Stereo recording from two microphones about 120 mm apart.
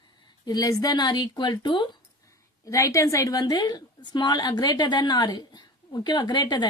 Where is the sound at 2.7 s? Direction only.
25° left (ahead or behind).